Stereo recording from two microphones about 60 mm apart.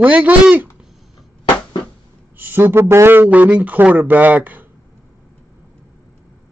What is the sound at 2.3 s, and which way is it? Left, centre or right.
Speech, right.